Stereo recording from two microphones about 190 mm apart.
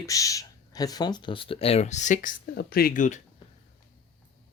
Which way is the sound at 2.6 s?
50° left (ahead or behind).